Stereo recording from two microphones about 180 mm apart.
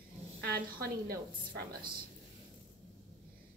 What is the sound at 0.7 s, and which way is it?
Speech, 55° right (ahead or behind).